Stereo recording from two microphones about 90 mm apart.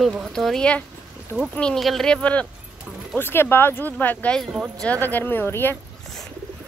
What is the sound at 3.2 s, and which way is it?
Speech, 25° left (ahead or behind).